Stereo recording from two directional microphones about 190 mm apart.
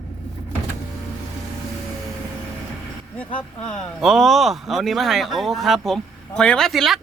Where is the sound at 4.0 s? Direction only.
Centre (ahead or behind).